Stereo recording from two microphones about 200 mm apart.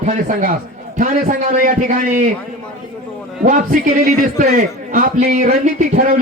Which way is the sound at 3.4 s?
45° right (ahead or behind).